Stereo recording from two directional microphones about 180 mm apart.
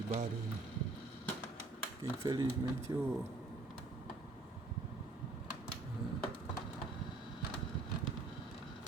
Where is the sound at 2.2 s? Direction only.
25° right (ahead or behind).